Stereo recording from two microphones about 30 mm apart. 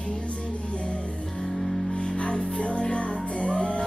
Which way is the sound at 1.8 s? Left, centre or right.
Left.